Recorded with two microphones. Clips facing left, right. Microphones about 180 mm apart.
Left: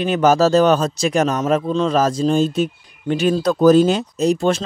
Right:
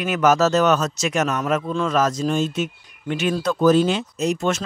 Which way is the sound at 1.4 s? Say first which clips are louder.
Left 4 dB; 20° left (ahead or behind).